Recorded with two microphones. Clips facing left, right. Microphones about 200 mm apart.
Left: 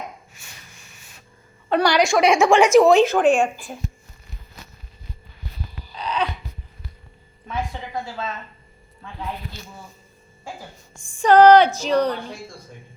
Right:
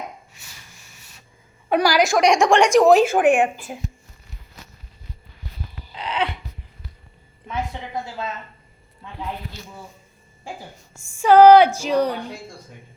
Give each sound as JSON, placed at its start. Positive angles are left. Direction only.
{"t": 1.7, "sound": "a woman's voice", "side_deg": -5}
{"t": 5.9, "sound": "a sound", "side_deg": -25}
{"t": 11.2, "sound": "speech", "side_deg": -10}